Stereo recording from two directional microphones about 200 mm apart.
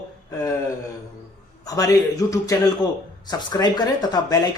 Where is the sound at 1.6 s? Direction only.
15° left (ahead or behind).